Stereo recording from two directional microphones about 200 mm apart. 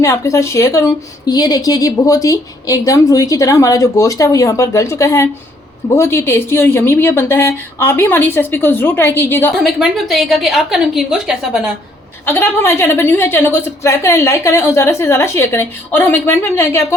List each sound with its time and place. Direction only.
0.0 s a woman's voice: 15° left (ahead or behind)
9.6 s a woman's voice: centre (ahead or behind)
12.2 s a woman's voice: 10° left (ahead or behind)